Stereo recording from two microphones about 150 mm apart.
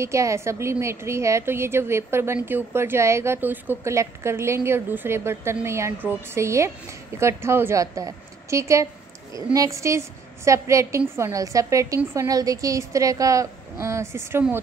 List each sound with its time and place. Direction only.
0.0 s a woman's voice: 20° right (ahead or behind)